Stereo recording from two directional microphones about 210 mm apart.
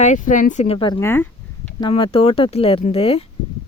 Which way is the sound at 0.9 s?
10° left (ahead or behind).